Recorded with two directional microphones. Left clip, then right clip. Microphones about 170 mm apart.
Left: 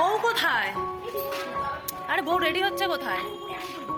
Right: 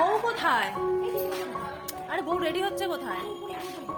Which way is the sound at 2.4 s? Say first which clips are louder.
Left 4 dB; 5° right (ahead or behind).